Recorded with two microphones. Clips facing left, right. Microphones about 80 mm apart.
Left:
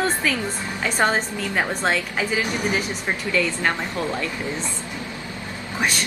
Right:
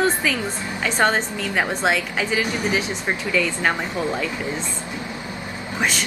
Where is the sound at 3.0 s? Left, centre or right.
Centre.